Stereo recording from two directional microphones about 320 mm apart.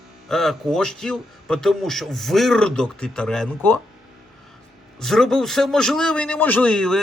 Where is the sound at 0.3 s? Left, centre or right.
Centre.